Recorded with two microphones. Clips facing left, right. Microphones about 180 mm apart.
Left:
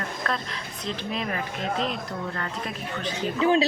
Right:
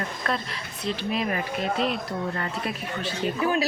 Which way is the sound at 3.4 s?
25° left (ahead or behind).